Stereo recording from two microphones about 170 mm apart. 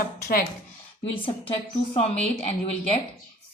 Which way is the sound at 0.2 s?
65° left (ahead or behind).